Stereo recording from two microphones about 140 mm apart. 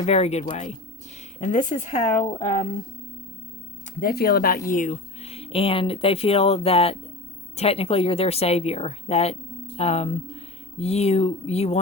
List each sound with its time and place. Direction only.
0.0 s speech: 50° left (ahead or behind)
1.4 s speech: 60° left (ahead or behind)
2.1 s speech: 35° left (ahead or behind)
4.0 s speech: 90° left
4.7 s speech: 70° left (ahead or behind)
5.2 s speech: 45° left (ahead or behind)